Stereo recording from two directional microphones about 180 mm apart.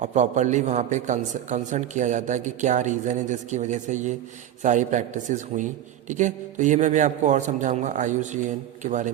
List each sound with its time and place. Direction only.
0.0 s a man's voice: 40° right (ahead or behind)